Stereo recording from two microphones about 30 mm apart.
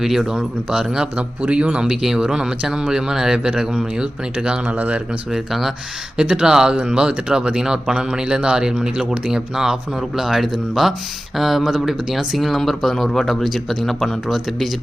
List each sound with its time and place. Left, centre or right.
0.0 s speech: centre
0.7 s speech: right
1.1 s a man's voice: right
2.0 s speech: centre
5.3 s speech: centre
6.2 s speech: right; by 14.7 s centre